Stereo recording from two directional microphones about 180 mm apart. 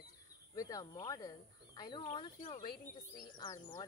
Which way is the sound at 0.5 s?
20° left (ahead or behind).